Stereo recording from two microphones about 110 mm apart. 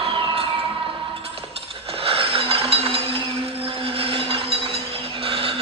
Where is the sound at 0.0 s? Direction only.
55° right (ahead or behind).